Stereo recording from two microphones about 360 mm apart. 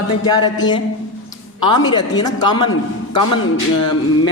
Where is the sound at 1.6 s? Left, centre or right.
Centre.